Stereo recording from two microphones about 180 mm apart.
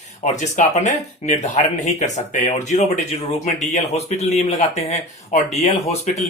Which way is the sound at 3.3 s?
40° left (ahead or behind).